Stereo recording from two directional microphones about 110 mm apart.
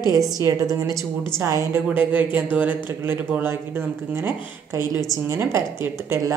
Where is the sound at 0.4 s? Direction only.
30° right (ahead or behind).